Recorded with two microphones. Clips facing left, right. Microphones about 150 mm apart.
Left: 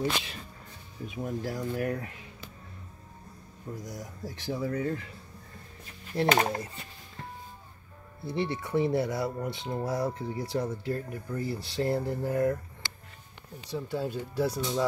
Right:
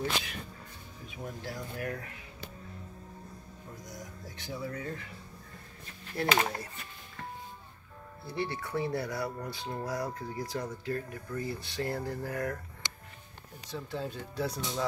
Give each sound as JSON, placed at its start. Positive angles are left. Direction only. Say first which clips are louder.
{"t": 0.0, "sound": "speech", "louder": "left 3 dB", "side_deg": 25}
{"t": 1.4, "sound": "speech", "louder": "left 6 dB", "side_deg": 30}
{"t": 4.5, "sound": "speech", "louder": "left 7 dB", "side_deg": 35}
{"t": 6.4, "sound": "speech", "louder": "left 4 dB", "side_deg": 20}
{"t": 8.3, "sound": "speech", "louder": "left 4 dB", "side_deg": 25}
{"t": 12.8, "sound": "music", "louder": "even", "side_deg": -20}
{"t": 13.7, "sound": "speech", "louder": "left 5 dB", "side_deg": 10}